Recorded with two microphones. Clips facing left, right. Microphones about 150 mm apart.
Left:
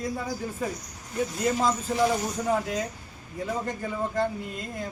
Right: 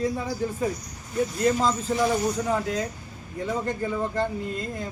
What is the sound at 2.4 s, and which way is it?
Speech, 5° left (ahead or behind).